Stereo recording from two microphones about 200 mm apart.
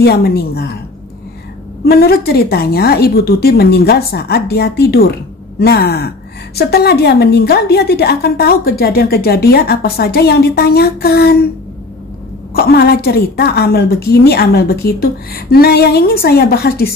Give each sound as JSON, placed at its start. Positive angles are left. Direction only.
{"t": 0.0, "sound": "a woman's voice", "side_deg": 50}
{"t": 1.9, "sound": "a woman's voice", "side_deg": 50}
{"t": 12.5, "sound": "a woman's voice", "side_deg": 50}